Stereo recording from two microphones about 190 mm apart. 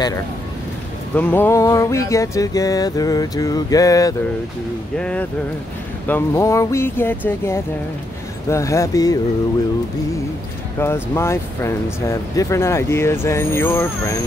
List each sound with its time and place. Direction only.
1.1 s speech: 10° left (ahead or behind)
4.9 s speech: 5° left (ahead or behind)
10.8 s speech: 15° left (ahead or behind)